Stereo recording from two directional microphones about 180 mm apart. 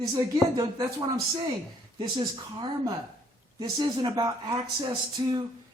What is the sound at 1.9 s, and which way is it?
Speech, 25° right (ahead or behind).